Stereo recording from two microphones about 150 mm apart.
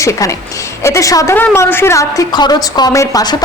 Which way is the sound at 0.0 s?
20° left (ahead or behind).